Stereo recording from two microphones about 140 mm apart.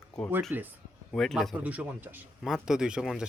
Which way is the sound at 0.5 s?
15° right (ahead or behind).